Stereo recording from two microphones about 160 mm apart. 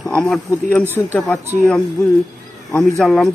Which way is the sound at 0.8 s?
15° right (ahead or behind).